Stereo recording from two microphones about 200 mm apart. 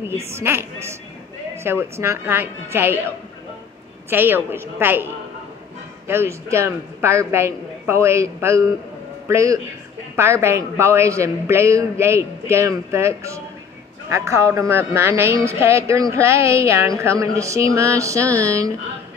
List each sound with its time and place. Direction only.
0.3 s a man's voice: 10° right (ahead or behind)
4.1 s a man's voice: 10° right (ahead or behind)
6.0 s a man's voice: 15° right (ahead or behind)